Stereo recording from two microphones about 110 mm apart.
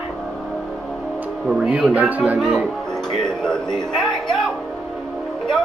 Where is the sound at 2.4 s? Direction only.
Centre (ahead or behind).